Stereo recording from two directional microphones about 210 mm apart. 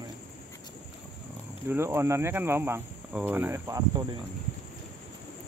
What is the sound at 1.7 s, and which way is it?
Speech, 10° right (ahead or behind).